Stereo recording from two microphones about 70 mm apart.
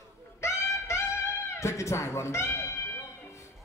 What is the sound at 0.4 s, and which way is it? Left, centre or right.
Music, left.